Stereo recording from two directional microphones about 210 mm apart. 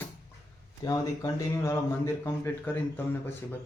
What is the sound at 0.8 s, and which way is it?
Speech, 15° left (ahead or behind).